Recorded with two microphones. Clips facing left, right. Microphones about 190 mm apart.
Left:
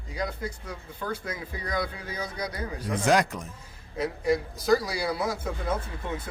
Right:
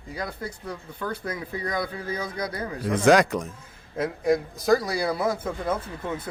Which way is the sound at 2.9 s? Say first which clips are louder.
Right 5 dB; 90° right.